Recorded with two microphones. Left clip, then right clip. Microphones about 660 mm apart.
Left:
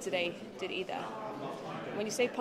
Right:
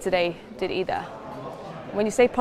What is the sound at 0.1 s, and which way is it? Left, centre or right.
Speech, right.